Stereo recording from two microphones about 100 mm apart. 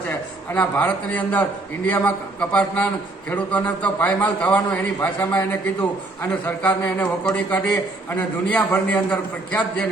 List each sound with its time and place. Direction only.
0.1 s a man's voice: 15° left (ahead or behind)